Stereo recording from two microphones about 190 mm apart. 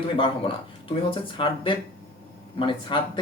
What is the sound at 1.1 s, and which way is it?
Speech, 25° left (ahead or behind).